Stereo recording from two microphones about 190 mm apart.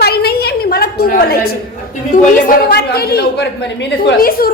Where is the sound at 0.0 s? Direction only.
55° left (ahead or behind).